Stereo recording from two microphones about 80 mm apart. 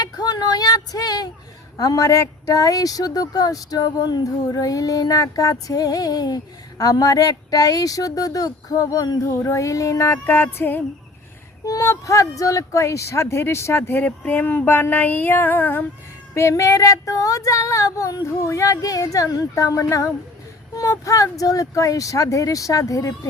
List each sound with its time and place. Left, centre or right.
0.0 s a sound: left
1.7 s speech: left
10.2 s speech: left
11.6 s speech: left
16.3 s speech: left